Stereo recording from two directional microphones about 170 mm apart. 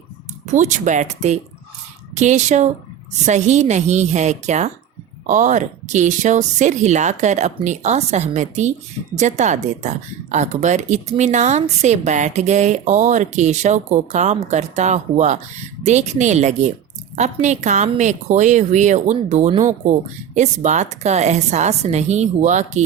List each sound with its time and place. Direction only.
0.5 s a woman's voice: 45° right (ahead or behind)